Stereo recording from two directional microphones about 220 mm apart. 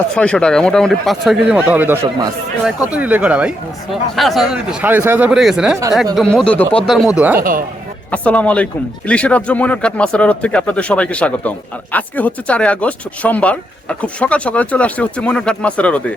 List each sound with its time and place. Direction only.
0.1 s speech: 5° left (ahead or behind)
7.3 s speech: 40° right (ahead or behind)
8.1 s speech: 5° left (ahead or behind)